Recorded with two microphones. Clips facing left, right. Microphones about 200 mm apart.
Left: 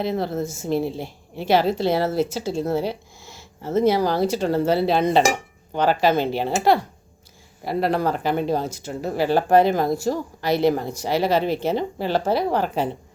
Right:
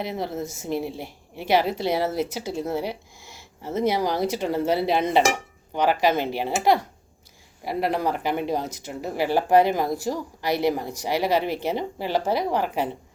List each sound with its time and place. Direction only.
0.0 s speech: 15° right (ahead or behind)
2.5 s a sound: 15° right (ahead or behind)
3.8 s speech: 15° right (ahead or behind)